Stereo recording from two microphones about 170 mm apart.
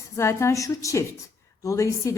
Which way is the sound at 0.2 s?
15° left (ahead or behind).